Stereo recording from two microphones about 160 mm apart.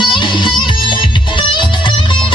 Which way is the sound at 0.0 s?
30° left (ahead or behind).